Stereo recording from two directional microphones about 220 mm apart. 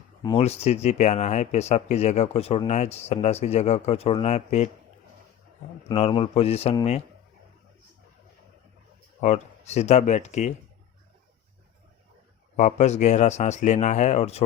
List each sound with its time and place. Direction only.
0.2 s speech: 25° left (ahead or behind)
5.9 s speech: 25° left (ahead or behind)
9.2 s speech: 30° left (ahead or behind)
12.5 s speech: 30° left (ahead or behind)